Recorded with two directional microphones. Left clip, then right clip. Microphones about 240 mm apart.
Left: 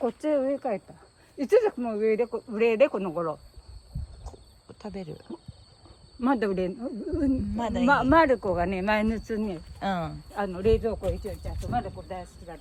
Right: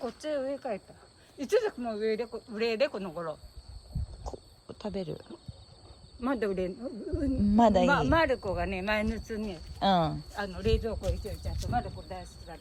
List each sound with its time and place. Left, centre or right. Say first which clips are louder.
0.2 s speech: left 4 dB; left
4.2 s a sound: right 6 dB; centre
6.1 s speech: left 5 dB; left
7.5 s speech: right 6 dB; centre
7.9 s speech: left 5 dB; centre
9.8 s speech: right 4 dB; centre
10.3 s speech: left 9 dB; left